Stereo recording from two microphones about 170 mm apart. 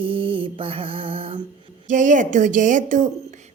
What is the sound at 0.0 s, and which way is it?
Mantra, 30° right (ahead or behind).